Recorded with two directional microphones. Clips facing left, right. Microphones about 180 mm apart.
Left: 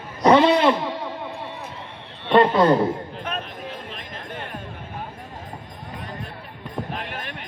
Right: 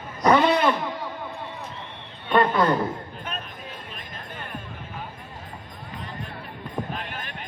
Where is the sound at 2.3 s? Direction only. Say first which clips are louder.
Left 4 dB; 25° left (ahead or behind).